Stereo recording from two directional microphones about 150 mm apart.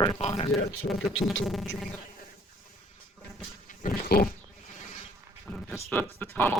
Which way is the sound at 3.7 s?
70° left (ahead or behind).